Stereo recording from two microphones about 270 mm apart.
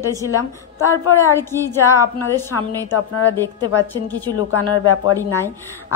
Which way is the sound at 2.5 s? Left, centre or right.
Left.